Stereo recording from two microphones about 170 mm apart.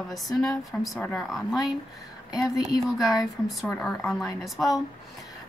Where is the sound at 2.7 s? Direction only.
Centre (ahead or behind).